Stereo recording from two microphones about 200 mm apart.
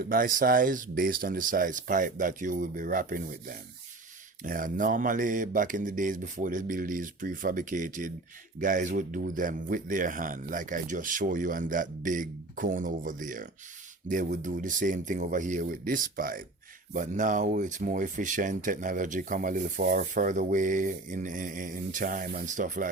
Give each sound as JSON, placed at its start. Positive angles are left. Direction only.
{"t": 0.0, "sound": "speech", "side_deg": -45}